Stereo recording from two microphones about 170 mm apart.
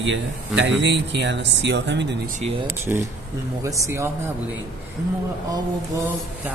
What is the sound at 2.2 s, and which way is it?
Speech, 50° right (ahead or behind).